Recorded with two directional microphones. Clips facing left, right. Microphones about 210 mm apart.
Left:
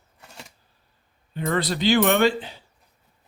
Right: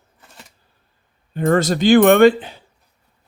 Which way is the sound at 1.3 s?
45° right (ahead or behind).